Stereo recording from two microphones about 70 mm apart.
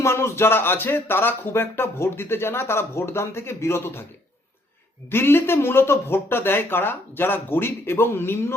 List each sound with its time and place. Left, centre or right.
0.0 s speech: left
5.1 s speech: left